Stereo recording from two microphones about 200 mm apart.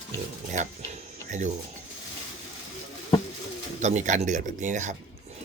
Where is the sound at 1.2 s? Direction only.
35° right (ahead or behind).